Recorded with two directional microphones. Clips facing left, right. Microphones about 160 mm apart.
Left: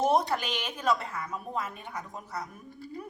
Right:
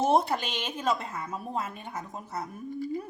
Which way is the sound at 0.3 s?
25° right (ahead or behind).